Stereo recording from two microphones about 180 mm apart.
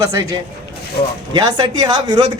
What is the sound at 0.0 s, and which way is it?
A man's voice, 20° right (ahead or behind).